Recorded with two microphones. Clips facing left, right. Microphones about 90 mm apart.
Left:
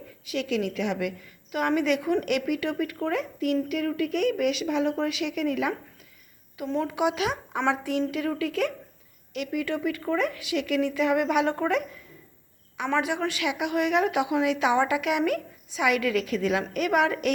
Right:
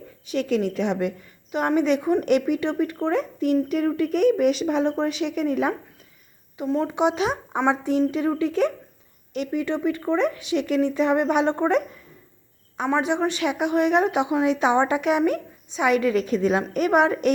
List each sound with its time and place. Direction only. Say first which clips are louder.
0.3 s a woman's voice: right 4 dB; 40° right (ahead or behind)
6.7 s a woman's voice: right 3 dB; 30° right (ahead or behind)
12.9 s a woman's voice: right 4 dB; 25° right (ahead or behind)